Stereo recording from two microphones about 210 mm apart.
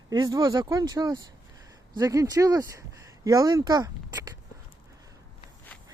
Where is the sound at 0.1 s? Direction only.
20° right (ahead or behind).